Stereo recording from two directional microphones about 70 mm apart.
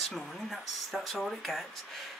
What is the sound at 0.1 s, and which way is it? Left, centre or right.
Speech, centre.